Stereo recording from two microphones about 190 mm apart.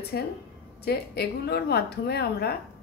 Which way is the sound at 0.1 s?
55° left (ahead or behind).